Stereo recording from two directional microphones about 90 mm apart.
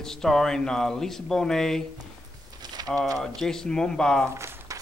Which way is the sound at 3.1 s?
5° left (ahead or behind).